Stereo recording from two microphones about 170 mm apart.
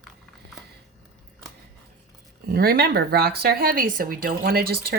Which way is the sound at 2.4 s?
65° right (ahead or behind).